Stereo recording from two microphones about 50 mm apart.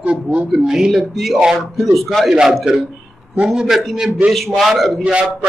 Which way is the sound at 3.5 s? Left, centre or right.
Centre.